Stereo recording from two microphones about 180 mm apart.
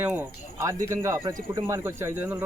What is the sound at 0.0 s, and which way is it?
A man's voice, 10° right (ahead or behind).